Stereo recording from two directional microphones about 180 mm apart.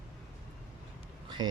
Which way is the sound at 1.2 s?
25° right (ahead or behind).